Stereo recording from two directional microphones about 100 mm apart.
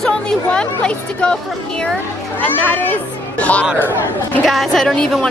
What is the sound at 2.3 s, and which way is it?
Speech, 20° left (ahead or behind).